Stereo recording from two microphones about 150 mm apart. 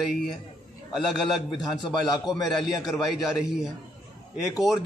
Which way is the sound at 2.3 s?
Centre (ahead or behind).